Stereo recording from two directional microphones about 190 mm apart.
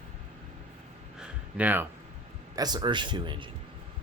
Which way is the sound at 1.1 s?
10° right (ahead or behind).